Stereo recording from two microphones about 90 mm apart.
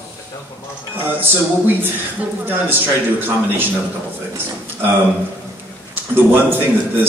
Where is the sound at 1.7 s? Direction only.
25° right (ahead or behind).